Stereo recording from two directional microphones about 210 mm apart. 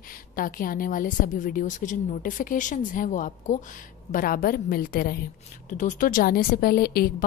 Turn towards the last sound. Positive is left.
turn(degrees=45)  # may be behind; listen again after turning